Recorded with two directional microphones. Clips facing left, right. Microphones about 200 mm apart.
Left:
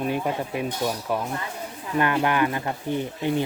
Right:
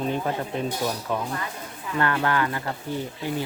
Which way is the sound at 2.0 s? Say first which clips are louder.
Left 2 dB; 15° left (ahead or behind).